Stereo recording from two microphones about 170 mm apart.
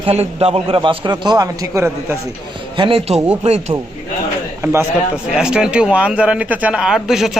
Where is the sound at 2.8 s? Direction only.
35° right (ahead or behind).